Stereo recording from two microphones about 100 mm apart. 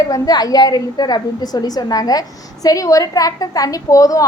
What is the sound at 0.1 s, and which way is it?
A woman's voice, 40° left (ahead or behind).